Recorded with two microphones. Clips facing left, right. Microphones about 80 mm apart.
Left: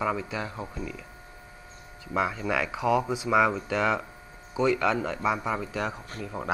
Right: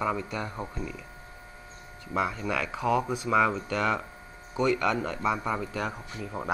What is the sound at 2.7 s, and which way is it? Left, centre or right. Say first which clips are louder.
Speech: even; centre.